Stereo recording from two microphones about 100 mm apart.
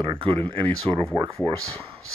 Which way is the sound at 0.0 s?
60° right (ahead or behind).